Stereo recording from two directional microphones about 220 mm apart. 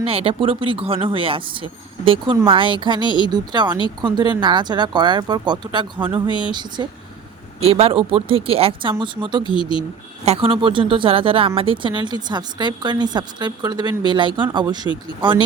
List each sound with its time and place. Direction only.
0.0 s speech: 25° right (ahead or behind)
9.4 s speech: 20° left (ahead or behind)
10.2 s speech: 25° right (ahead or behind)